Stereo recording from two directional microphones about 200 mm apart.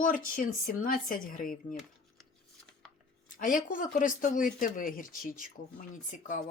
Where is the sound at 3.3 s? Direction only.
40° left (ahead or behind).